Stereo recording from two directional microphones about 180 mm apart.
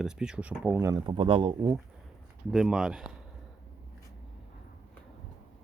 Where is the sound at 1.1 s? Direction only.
30° right (ahead or behind).